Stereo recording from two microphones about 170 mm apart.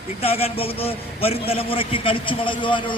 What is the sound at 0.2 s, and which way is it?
A man's voice, 35° left (ahead or behind).